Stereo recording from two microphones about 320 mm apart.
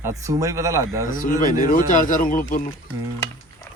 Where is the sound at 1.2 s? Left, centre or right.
Left.